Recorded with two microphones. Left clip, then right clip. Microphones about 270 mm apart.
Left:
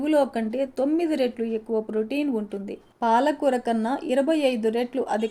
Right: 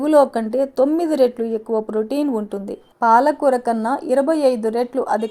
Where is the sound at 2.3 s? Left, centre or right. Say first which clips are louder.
Right 5 dB; right.